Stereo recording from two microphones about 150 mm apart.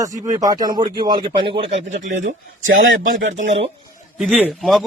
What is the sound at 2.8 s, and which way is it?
Speech, 65° right (ahead or behind).